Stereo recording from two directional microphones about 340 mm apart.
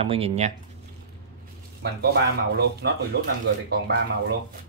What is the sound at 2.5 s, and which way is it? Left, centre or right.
Speech, right.